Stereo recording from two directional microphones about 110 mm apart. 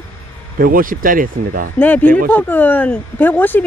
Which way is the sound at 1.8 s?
15° left (ahead or behind).